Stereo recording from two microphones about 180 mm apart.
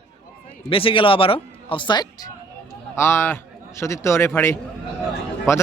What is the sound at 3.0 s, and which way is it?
A man's voice, 15° left (ahead or behind).